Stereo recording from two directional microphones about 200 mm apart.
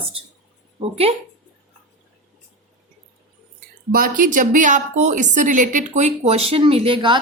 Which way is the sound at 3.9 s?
45° right (ahead or behind).